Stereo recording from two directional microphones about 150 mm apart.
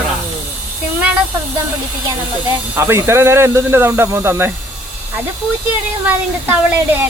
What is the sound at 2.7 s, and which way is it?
Speech, 15° right (ahead or behind).